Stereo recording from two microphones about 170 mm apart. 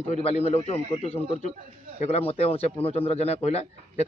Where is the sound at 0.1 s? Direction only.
40° left (ahead or behind).